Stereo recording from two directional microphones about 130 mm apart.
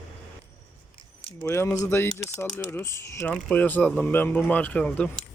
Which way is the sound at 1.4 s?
20° left (ahead or behind).